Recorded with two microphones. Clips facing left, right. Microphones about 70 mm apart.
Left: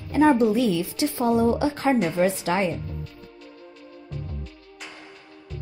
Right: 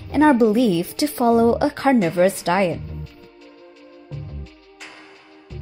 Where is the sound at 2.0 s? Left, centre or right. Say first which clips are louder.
Right 5 dB; right.